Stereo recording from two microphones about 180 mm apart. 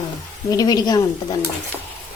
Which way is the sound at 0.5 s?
20° left (ahead or behind).